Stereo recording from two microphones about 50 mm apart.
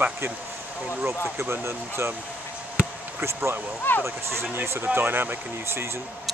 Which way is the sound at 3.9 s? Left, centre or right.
Left.